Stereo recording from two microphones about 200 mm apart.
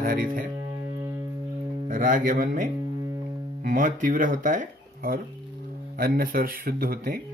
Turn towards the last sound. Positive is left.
turn(degrees=-45)  # may be behind; listen again after turning